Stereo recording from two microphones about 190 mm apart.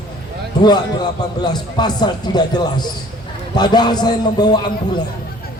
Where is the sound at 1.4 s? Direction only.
20° left (ahead or behind).